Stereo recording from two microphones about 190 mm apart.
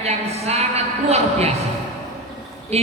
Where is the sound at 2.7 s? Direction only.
35° right (ahead or behind).